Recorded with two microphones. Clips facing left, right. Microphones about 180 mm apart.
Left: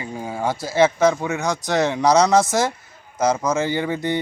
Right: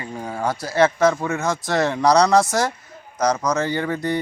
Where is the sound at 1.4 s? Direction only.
20° left (ahead or behind).